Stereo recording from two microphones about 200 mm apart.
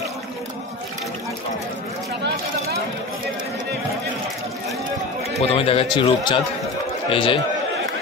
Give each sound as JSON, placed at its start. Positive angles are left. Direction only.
{"t": 5.5, "sound": "speech", "side_deg": 30}